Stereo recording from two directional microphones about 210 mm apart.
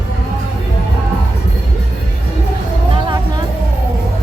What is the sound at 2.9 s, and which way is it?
Music, 25° right (ahead or behind).